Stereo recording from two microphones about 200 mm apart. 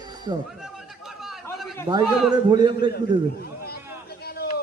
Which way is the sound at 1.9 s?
20° right (ahead or behind).